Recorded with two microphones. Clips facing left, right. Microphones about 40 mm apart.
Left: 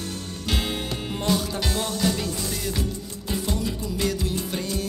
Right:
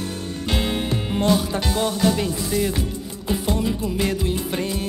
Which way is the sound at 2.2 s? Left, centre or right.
Centre.